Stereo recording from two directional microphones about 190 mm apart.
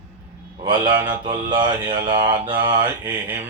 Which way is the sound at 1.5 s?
25° right (ahead or behind).